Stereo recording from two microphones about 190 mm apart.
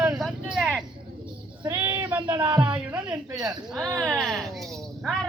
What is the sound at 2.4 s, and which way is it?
Speech, 25° right (ahead or behind).